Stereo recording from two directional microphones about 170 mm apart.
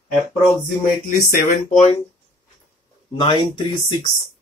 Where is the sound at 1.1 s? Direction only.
50° left (ahead or behind).